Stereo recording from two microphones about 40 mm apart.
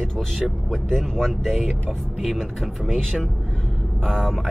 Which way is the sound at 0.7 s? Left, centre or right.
Centre.